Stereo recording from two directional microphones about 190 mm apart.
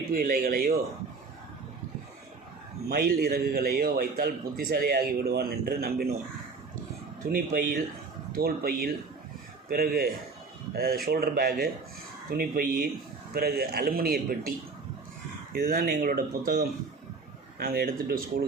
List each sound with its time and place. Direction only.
0.1 s a man's voice: 50° right (ahead or behind)
2.9 s a man's voice: 55° right (ahead or behind)
7.3 s a man's voice: 50° right (ahead or behind)
15.5 s a man's voice: 50° right (ahead or behind)